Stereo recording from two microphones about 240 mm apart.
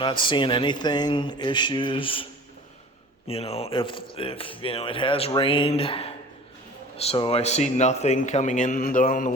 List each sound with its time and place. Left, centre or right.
0.0 s speech: centre
3.2 s speech: left